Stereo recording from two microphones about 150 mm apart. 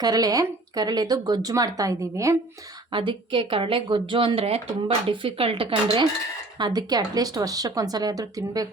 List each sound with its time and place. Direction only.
0.0 s speech: 25° right (ahead or behind)
2.9 s a woman's voice: 35° right (ahead or behind)
6.6 s speech: 25° right (ahead or behind)